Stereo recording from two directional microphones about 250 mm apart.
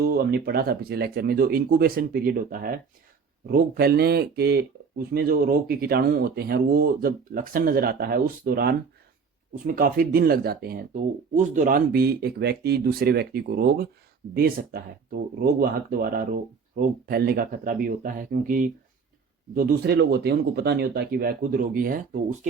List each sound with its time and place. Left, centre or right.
0.0 s speech: right
15.9 s speech: right